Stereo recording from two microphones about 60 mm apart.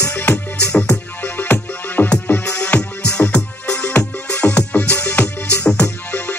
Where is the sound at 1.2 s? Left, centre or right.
Left.